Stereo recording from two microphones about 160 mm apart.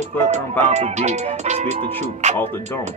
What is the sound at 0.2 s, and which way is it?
Speech, 45° right (ahead or behind).